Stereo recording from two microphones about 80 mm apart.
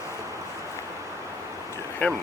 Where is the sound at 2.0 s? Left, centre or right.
Centre.